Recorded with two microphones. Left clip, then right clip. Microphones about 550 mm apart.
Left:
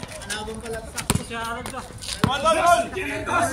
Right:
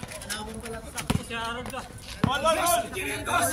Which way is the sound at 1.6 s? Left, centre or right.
Centre.